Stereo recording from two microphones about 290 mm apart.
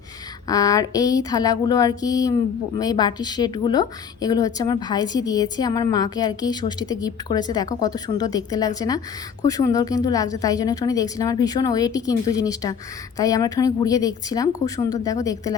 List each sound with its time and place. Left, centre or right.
0.4 s a woman's voice: centre
14.6 s speech: left
15.0 s a woman's voice: centre